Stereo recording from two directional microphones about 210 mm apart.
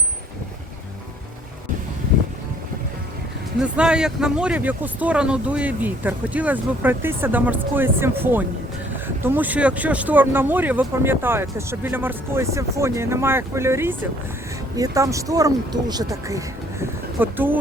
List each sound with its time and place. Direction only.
3.6 s speech: 5° right (ahead or behind)